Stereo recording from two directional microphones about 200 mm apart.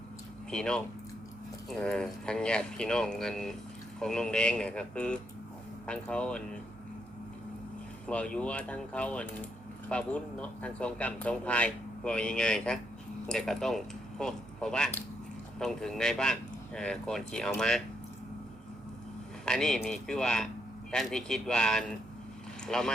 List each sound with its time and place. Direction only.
0.5 s speech: 5° left (ahead or behind)
8.0 s speech: 5° left (ahead or behind)
19.5 s speech: 5° left (ahead or behind)